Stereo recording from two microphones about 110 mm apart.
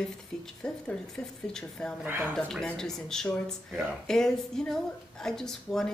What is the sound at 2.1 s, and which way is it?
Speech, 20° right (ahead or behind).